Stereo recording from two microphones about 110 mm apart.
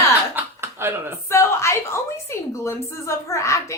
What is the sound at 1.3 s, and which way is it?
A woman's voice, 25° left (ahead or behind).